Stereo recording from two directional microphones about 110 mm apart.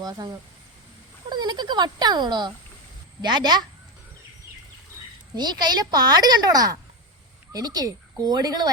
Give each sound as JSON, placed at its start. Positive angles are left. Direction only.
{"t": 0.0, "sound": "a woman's voice", "side_deg": -40}
{"t": 5.3, "sound": "a woman's voice", "side_deg": -40}